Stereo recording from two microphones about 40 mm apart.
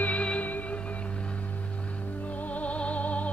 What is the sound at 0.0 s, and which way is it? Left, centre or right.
Music, left.